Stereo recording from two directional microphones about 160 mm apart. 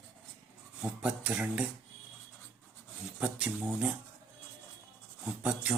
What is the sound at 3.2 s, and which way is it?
Speech, 5° right (ahead or behind).